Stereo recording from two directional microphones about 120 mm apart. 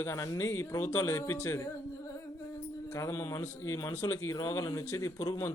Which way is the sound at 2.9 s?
25° left (ahead or behind).